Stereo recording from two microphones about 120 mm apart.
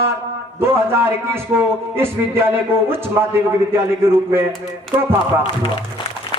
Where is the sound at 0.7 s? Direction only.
20° right (ahead or behind).